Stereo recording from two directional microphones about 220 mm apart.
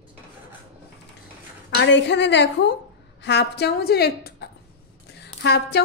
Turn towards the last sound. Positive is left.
turn(degrees=50)  # may be behind; listen again after turning